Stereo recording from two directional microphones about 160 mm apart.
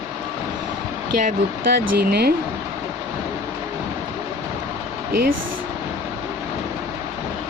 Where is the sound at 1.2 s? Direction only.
60° right (ahead or behind).